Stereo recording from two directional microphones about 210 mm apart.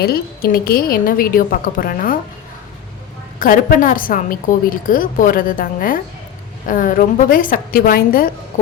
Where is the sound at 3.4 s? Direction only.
40° left (ahead or behind).